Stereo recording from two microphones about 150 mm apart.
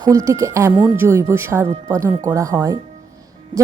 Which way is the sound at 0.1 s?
20° right (ahead or behind).